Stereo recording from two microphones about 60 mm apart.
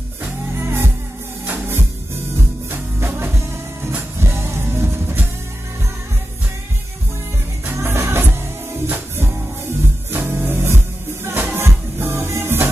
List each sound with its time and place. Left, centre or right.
0.6 s music: right
7.6 s music: right